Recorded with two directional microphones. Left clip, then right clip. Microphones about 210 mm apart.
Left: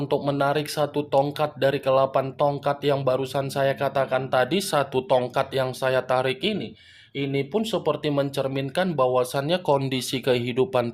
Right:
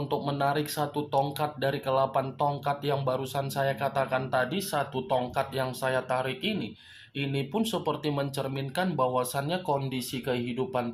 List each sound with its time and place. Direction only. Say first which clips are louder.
0.1 s speech: left 5 dB; 35° left (ahead or behind)